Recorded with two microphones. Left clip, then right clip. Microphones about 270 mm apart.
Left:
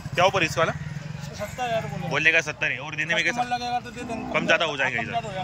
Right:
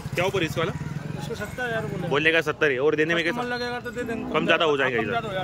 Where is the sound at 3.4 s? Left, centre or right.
Centre.